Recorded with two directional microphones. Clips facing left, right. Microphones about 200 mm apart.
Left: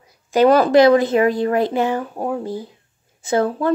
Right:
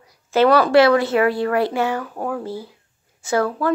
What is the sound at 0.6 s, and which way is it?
Speech, 20° left (ahead or behind).